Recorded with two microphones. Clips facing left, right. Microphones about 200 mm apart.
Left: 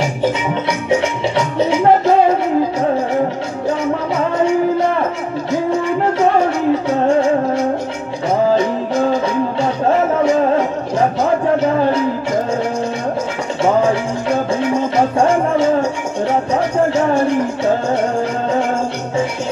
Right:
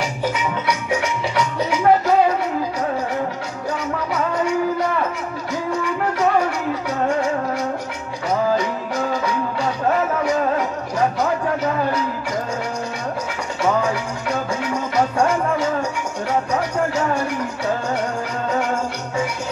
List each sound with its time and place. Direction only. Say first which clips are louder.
0.0 s music: left 5 dB; 25° left (ahead or behind)
5.5 s music: left 7 dB; 25° left (ahead or behind)
13.6 s music: left 6 dB; 25° left (ahead or behind)